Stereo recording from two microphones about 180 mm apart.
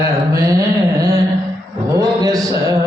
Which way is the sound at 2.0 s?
20° right (ahead or behind).